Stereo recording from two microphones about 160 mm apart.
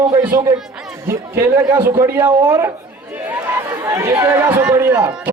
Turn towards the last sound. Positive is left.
turn(degrees=-10)  # may be behind; listen again after turning